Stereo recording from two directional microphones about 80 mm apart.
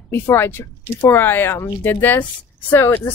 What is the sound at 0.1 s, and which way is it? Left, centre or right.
Speech, left.